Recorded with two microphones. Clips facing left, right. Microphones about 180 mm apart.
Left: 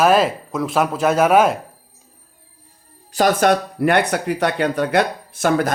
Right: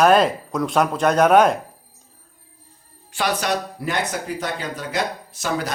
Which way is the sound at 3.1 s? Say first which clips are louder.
Left 7 dB; 45° left (ahead or behind).